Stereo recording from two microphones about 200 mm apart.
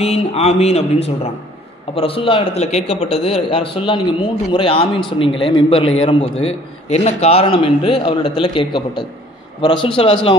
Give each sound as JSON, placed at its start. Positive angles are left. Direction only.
{"t": 0.0, "sound": "a man's voice", "side_deg": 30}